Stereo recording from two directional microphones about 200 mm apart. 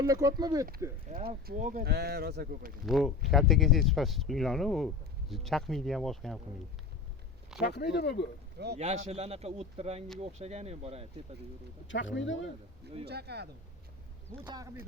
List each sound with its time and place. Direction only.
0.0 s speech: 15° right (ahead or behind)
1.1 s speech: 35° right (ahead or behind); by 2.7 s 50° right (ahead or behind)
2.8 s speech: centre (ahead or behind)
7.6 s speech: 55° left (ahead or behind)
8.5 s speech: 55° right (ahead or behind)
9.0 s speech: 30° right (ahead or behind)
11.9 s speech: 65° left (ahead or behind)
13.1 s speech: 55° right (ahead or behind)
14.4 s speech: 20° right (ahead or behind)